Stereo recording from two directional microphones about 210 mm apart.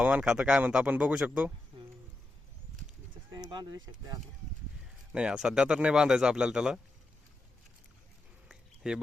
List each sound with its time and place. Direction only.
0.0 s speech: 5° right (ahead or behind)
3.3 s speech: 20° right (ahead or behind)
5.1 s speech: 5° right (ahead or behind)
8.4 s a sound: 5° right (ahead or behind)